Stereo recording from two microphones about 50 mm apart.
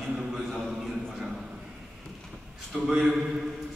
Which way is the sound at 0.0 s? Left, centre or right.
Centre.